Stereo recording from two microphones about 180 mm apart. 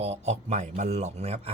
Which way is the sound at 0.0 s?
35° right (ahead or behind).